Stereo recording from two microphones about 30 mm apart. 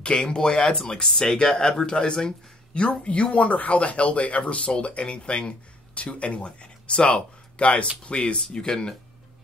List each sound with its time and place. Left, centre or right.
0.0 s speech: left
2.7 s speech: left
8.4 s speech: left